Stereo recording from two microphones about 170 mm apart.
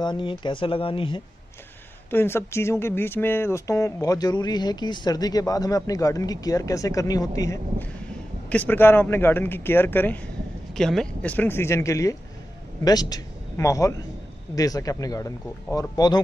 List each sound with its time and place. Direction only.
0.0 s speech: 25° left (ahead or behind)
2.0 s speech: 15° left (ahead or behind)